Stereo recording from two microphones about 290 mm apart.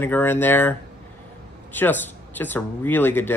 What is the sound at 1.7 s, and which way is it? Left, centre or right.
Speech, centre.